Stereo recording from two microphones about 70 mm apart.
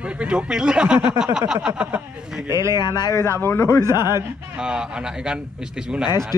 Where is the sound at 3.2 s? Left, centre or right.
Left.